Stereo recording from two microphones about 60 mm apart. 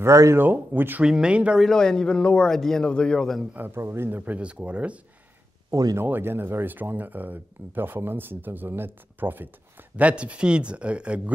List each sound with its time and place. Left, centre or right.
0.0 s speech: right
0.4 s speech: right
1.0 s speech: centre
1.6 s a man's voice: centre
3.5 s speech: right
4.2 s speech: right
6.0 s speech: right
10.0 s speech: centre